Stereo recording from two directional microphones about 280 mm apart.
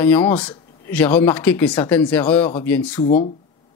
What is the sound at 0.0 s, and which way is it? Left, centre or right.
Speech, centre.